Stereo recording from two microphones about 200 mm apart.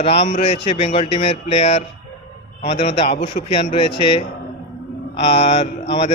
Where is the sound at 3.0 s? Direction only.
35° left (ahead or behind).